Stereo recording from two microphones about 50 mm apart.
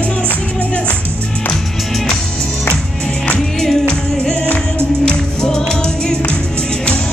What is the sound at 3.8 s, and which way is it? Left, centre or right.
Music, centre.